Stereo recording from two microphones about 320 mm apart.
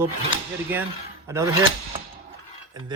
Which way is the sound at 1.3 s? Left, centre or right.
Centre.